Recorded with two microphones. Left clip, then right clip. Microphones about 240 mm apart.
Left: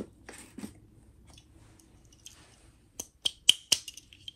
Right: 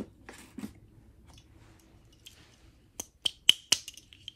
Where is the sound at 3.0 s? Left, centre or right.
Centre.